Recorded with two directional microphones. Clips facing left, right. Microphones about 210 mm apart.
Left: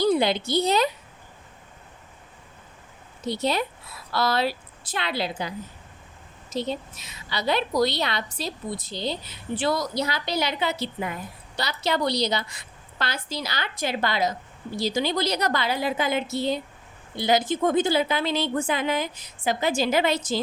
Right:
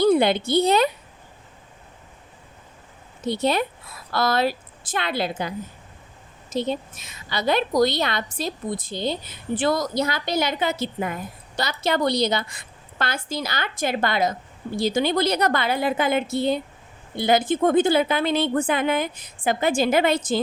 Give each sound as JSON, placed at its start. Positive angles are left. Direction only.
{"t": 0.0, "sound": "a woman's voice", "side_deg": -55}
{"t": 3.2, "sound": "a woman's voice", "side_deg": -55}